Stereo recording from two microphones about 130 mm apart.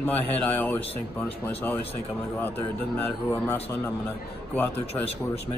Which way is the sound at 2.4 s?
15° left (ahead or behind).